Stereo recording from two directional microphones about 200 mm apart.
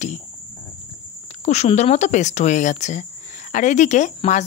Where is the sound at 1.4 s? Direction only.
35° left (ahead or behind).